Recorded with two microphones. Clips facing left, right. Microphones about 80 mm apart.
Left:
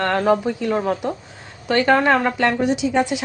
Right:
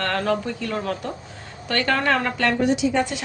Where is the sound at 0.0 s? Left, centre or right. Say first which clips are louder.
Left 5 dB; centre.